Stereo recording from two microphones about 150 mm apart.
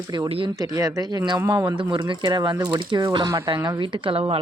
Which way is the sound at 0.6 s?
20° right (ahead or behind).